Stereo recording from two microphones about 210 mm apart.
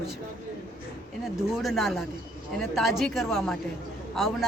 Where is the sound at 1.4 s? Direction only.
Centre (ahead or behind).